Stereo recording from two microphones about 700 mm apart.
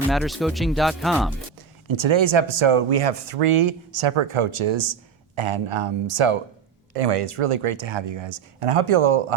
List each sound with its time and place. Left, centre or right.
0.1 s speech: centre
1.9 s speech: right